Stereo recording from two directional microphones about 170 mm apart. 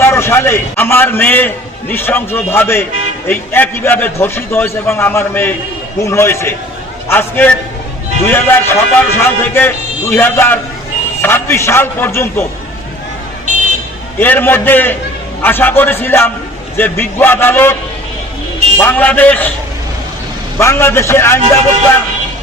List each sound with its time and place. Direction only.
0.0 s a man's voice: 15° left (ahead or behind)
14.2 s a man's voice: 10° left (ahead or behind)
18.8 s a man's voice: 10° left (ahead or behind)
20.6 s a man's voice: 15° left (ahead or behind)